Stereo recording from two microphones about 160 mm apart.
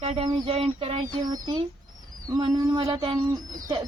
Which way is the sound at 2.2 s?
20° right (ahead or behind).